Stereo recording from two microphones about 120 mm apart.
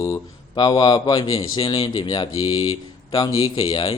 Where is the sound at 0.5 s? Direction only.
35° left (ahead or behind).